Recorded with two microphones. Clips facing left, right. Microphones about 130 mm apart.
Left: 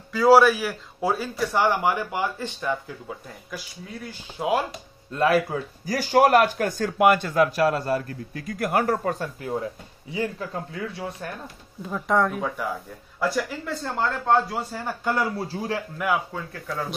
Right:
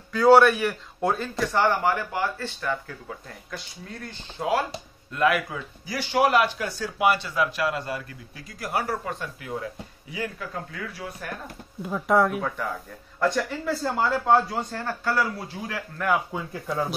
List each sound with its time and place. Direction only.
0.1 s speech: centre (ahead or behind)
5.1 s speech: 30° left (ahead or behind)
11.8 s speech: 5° right (ahead or behind); by 15.8 s 30° left (ahead or behind)
16.3 s speech: 15° right (ahead or behind)